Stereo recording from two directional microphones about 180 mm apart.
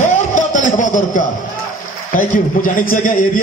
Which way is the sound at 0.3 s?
45° left (ahead or behind).